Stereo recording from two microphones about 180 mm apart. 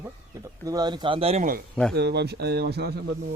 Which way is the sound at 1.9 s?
65° right (ahead or behind).